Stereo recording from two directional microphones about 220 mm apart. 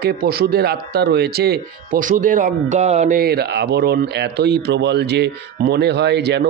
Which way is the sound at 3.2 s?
45° right (ahead or behind).